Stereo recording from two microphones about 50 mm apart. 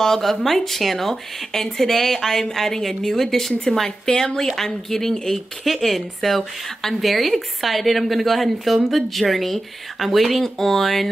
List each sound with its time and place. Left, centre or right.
0.0 s a woman's voice: centre